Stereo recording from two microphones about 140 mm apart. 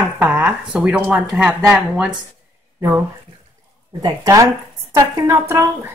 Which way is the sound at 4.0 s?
25° right (ahead or behind).